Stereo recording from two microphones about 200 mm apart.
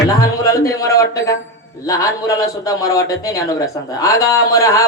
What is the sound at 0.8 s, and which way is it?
Music, 15° left (ahead or behind).